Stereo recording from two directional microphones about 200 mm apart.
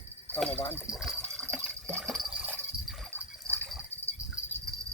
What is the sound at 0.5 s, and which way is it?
Speech, 30° left (ahead or behind).